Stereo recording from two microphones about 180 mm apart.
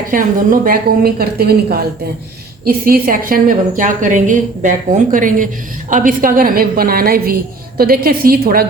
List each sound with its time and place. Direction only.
0.1 s a woman's voice: 50° right (ahead or behind)